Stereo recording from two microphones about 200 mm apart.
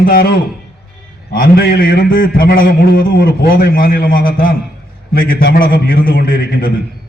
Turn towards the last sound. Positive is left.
turn(degrees=45)  # may be behind; listen again after turning